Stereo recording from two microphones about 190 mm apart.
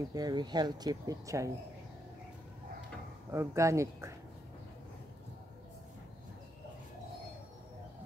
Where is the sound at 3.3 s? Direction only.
15° right (ahead or behind).